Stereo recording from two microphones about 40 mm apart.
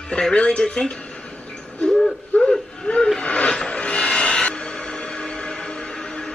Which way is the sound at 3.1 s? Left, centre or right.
Left.